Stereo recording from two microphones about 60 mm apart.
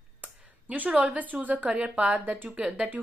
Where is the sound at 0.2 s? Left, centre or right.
Right.